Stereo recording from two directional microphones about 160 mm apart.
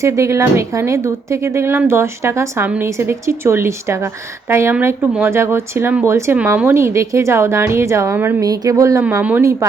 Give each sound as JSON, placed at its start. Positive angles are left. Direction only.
{"t": 0.0, "sound": "speech", "side_deg": -20}